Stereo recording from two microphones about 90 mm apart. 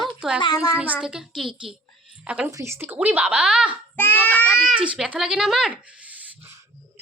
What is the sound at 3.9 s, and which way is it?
Speech, 20° left (ahead or behind).